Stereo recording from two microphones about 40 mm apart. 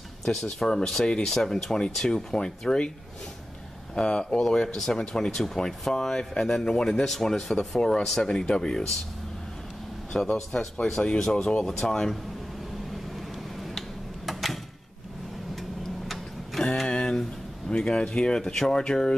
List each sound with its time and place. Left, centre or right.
0.2 s speech: centre
3.9 s speech: left
4.4 s speech: centre
10.1 s speech: centre
14.2 s a sound: centre
16.8 s a sound: left
17.6 s speech: left